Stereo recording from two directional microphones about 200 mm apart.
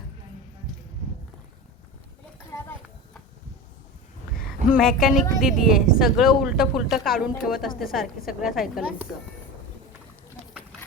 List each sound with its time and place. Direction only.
4.7 s speech: centre (ahead or behind)